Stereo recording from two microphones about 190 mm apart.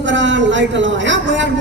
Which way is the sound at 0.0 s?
75° right (ahead or behind).